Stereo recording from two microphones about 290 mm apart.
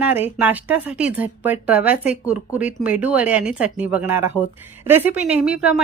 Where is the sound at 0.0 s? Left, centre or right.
Centre.